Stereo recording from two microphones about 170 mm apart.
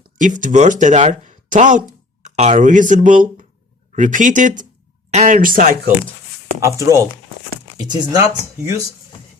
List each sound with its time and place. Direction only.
0.2 s speech: 50° right (ahead or behind)
6.6 s speech: 15° right (ahead or behind)